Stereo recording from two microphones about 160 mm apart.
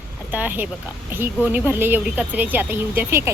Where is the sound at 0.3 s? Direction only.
10° right (ahead or behind).